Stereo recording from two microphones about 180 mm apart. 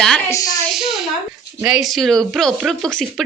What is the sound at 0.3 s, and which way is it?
Speech, 15° left (ahead or behind).